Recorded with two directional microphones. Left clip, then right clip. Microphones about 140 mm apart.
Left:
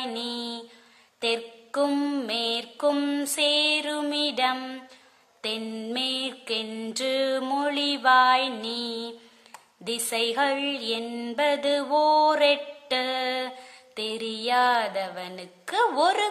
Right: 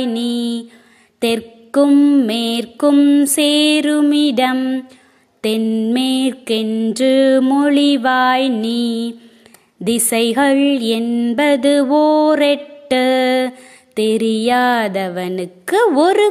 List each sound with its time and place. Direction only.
0.0 s mantra: 45° right (ahead or behind)
1.9 s mantra: 30° right (ahead or behind)
2.2 s mantra: 45° right (ahead or behind)
2.9 s mantra: 30° right (ahead or behind)
3.3 s mantra: 45° right (ahead or behind)
4.6 s mantra: 30° right (ahead or behind)
5.9 s mantra: 45° right (ahead or behind)